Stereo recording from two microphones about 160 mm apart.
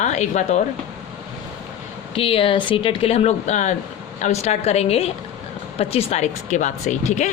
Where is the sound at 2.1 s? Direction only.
35° left (ahead or behind).